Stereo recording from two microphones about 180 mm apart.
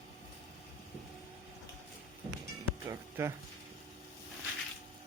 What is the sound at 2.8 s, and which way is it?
Speech, 15° right (ahead or behind).